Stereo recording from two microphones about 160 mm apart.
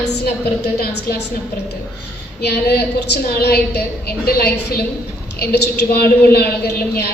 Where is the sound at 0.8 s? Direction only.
75° left (ahead or behind).